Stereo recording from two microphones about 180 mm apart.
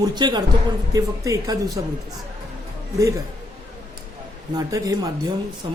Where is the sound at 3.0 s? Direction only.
20° right (ahead or behind).